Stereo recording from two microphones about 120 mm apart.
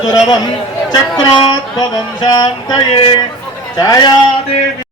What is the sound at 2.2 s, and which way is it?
A man's voice, 35° left (ahead or behind).